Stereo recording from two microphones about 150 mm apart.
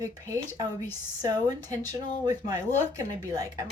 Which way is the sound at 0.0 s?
20° right (ahead or behind).